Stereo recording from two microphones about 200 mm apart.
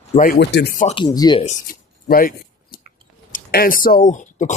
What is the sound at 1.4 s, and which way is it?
Speech, 45° left (ahead or behind).